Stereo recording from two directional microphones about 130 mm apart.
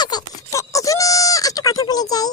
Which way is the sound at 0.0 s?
30° left (ahead or behind).